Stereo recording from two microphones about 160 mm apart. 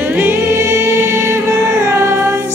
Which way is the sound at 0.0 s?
15° right (ahead or behind).